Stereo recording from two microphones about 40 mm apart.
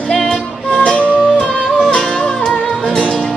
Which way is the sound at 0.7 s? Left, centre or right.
Left.